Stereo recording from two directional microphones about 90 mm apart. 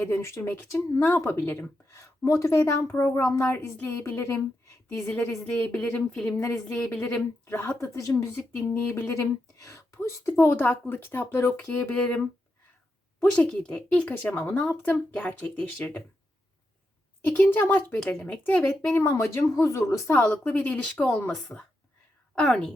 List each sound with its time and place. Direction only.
0.0 s speech: 30° left (ahead or behind)
4.9 s speech: 10° left (ahead or behind)
7.4 s speech: 25° left (ahead or behind)
8.3 s speech: 20° left (ahead or behind)
9.0 s speech: 30° left (ahead or behind)
10.3 s speech: 20° left (ahead or behind)
17.2 s speech: 15° left (ahead or behind)
18.9 s speech: 25° left (ahead or behind)
20.2 s speech: 15° left (ahead or behind)